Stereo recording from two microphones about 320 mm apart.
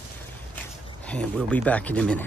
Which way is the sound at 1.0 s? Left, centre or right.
Centre.